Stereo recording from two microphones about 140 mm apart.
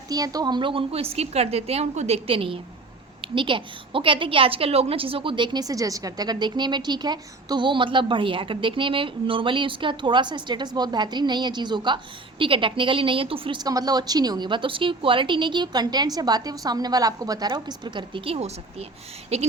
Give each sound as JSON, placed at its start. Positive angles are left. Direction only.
{"t": 0.1, "sound": "a woman's voice", "side_deg": -25}